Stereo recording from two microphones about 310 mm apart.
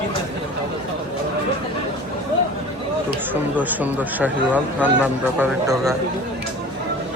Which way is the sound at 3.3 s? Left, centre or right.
Centre.